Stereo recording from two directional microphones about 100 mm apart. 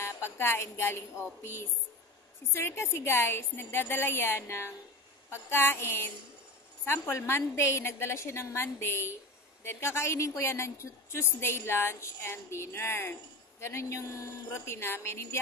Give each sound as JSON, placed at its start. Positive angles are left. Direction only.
{"t": 0.0, "sound": "a woman's voice", "side_deg": 25}